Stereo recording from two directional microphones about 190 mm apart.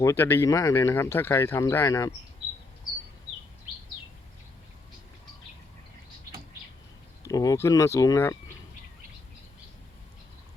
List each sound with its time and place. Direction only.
0.0 s speech: 15° left (ahead or behind)
7.3 s speech: 20° left (ahead or behind)